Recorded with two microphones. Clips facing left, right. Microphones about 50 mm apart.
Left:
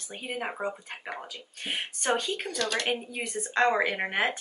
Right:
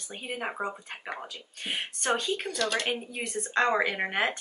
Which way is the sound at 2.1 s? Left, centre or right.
Centre.